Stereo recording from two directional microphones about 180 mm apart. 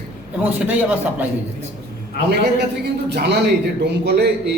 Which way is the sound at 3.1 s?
70° right (ahead or behind).